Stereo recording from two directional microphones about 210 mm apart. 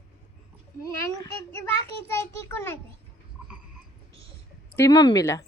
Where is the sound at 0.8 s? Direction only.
15° left (ahead or behind).